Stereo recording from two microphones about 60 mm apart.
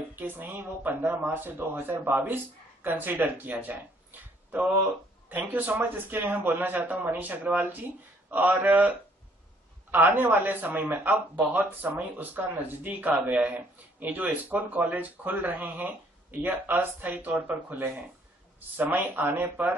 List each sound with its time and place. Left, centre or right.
0.1 s speech: right